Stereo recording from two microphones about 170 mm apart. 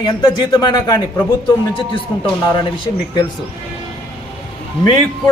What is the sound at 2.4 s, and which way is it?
Speech, 25° left (ahead or behind).